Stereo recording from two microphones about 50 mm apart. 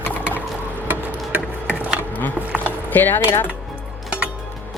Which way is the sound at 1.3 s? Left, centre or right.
Right.